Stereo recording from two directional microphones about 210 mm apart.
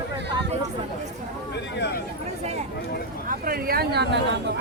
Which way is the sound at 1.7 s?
55° left (ahead or behind).